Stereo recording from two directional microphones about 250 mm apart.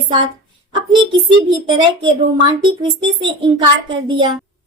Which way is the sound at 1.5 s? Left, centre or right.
Centre.